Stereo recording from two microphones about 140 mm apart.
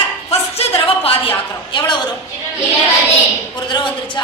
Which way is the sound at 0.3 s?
45° left (ahead or behind).